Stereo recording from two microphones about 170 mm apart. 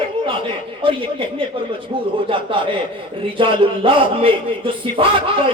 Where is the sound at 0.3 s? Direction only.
30° right (ahead or behind).